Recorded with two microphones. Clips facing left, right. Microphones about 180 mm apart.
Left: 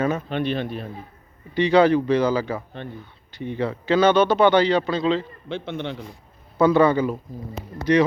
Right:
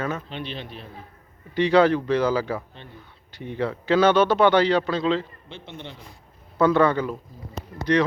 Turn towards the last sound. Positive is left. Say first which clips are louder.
# left 1 dB
turn(degrees=30)  # may be behind; listen again after turning